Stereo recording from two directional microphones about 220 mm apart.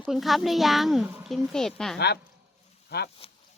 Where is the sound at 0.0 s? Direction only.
Centre (ahead or behind).